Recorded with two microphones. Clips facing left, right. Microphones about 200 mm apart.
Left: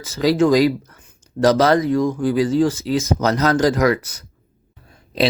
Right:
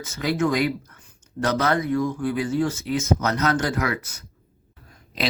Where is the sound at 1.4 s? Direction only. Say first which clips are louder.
Left 10 dB; 50° left (ahead or behind).